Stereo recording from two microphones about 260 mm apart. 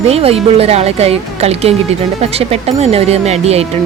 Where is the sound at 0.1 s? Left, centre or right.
Right.